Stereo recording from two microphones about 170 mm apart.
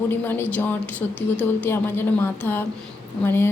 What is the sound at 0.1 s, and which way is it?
Speech, 10° left (ahead or behind).